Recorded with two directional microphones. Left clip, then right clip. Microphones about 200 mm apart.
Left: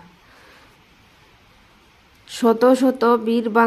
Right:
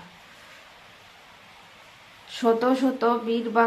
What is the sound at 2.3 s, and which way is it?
Speech, 40° left (ahead or behind).